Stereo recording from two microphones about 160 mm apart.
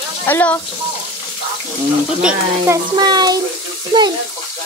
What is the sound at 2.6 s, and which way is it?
Speech, 25° right (ahead or behind).